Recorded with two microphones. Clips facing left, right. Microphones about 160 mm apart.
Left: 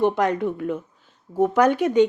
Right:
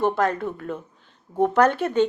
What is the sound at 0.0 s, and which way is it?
Speech, 20° left (ahead or behind).